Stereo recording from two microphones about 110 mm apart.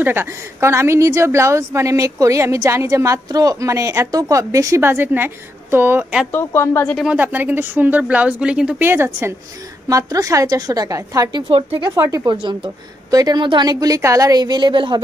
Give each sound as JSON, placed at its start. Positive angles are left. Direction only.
{"t": 0.0, "sound": "a woman's voice", "side_deg": -20}
{"t": 6.3, "sound": "a woman's voice", "side_deg": 25}
{"t": 7.2, "sound": "speech", "side_deg": -15}
{"t": 8.8, "sound": "a woman's voice", "side_deg": -20}
{"t": 12.4, "sound": "a woman's voice", "side_deg": -45}